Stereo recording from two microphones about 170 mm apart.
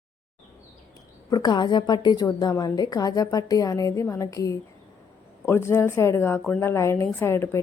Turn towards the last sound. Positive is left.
turn(degrees=15)  # may be behind; listen again after turning